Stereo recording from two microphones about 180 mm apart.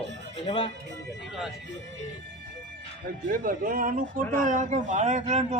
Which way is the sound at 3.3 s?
50° right (ahead or behind).